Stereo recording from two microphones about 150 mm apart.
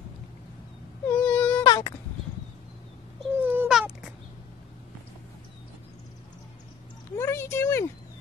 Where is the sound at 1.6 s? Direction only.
25° left (ahead or behind).